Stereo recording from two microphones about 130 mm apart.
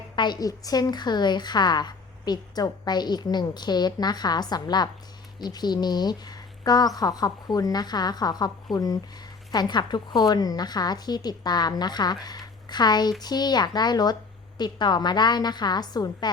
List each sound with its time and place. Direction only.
0.2 s a woman's voice: 30° left (ahead or behind)